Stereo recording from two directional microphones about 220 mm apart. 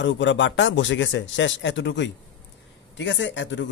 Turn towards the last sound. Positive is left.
turn(degrees=55)  # may be behind; listen again after turning